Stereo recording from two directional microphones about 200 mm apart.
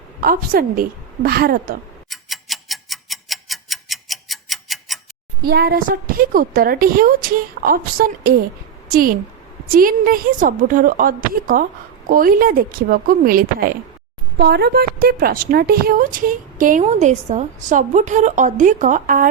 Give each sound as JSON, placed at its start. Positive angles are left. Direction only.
{"t": 0.2, "sound": "a woman's voice", "side_deg": -45}
{"t": 2.0, "sound": "tick-tock", "side_deg": 0}
{"t": 5.4, "sound": "a woman's voice", "side_deg": -50}
{"t": 14.3, "sound": "a woman's voice", "side_deg": -55}